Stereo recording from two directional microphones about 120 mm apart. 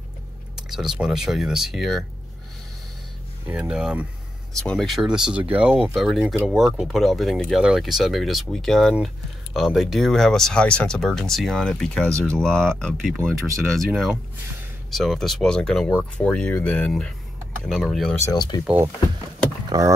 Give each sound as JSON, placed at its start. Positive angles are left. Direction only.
{"t": 0.6, "sound": "speech", "side_deg": -5}
{"t": 3.4, "sound": "speech", "side_deg": -10}
{"t": 4.6, "sound": "speech", "side_deg": 0}
{"t": 18.2, "sound": "speech", "side_deg": 35}
{"t": 19.7, "sound": "speech", "side_deg": -35}